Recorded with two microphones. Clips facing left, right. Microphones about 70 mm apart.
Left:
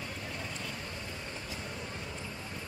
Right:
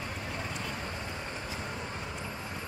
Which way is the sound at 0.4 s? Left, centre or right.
Right.